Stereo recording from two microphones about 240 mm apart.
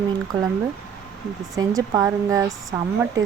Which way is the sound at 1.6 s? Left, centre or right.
Centre.